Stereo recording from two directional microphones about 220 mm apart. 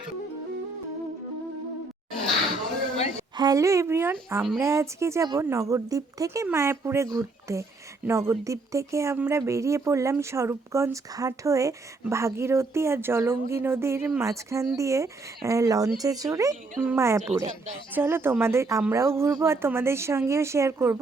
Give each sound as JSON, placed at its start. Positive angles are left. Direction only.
{"t": 3.3, "sound": "speech", "side_deg": -15}